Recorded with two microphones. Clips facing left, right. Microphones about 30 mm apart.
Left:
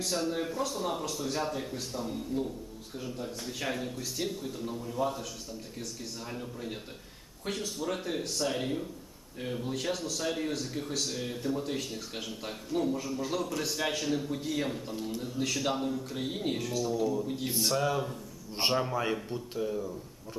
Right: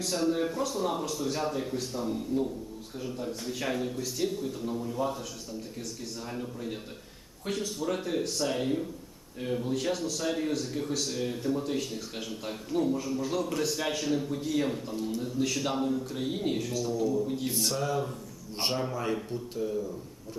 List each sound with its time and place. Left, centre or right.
0.0 s speech: centre
6.2 s speech: centre
16.9 s speech: centre